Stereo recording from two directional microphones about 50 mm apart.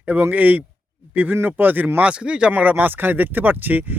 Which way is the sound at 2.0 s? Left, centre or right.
Right.